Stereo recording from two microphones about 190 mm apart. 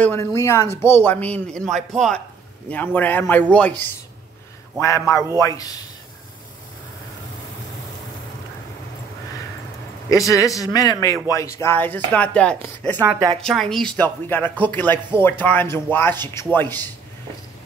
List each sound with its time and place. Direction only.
0.0 s speech: 15° left (ahead or behind)
10.0 s speech: 15° left (ahead or behind)
13.0 s a woman's voice: 10° right (ahead or behind)
13.4 s speech: centre (ahead or behind)